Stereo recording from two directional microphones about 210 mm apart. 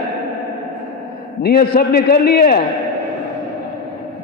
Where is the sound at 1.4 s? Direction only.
45° left (ahead or behind).